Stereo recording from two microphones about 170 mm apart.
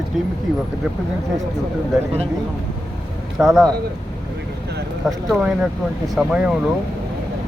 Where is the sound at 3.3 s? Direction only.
Centre (ahead or behind).